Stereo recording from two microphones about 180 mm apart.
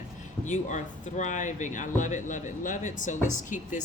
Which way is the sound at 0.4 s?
40° left (ahead or behind).